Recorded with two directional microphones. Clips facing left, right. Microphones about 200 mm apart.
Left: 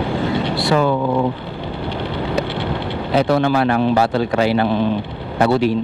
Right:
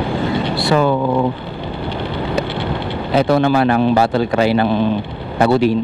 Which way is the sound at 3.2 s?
15° right (ahead or behind).